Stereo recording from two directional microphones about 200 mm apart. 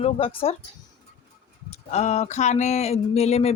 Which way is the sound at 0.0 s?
30° left (ahead or behind).